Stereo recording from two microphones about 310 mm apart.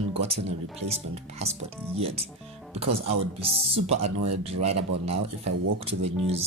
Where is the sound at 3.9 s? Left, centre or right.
Right.